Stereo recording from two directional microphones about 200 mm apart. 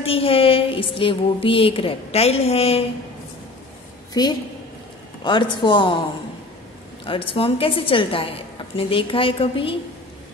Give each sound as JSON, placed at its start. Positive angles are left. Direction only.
{"t": 0.0, "sound": "a woman's voice", "side_deg": 30}
{"t": 4.1, "sound": "a woman's voice", "side_deg": 20}
{"t": 7.1, "sound": "a woman's voice", "side_deg": 25}